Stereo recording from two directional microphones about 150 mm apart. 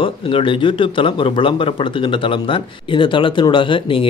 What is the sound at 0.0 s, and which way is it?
Speech, 35° left (ahead or behind).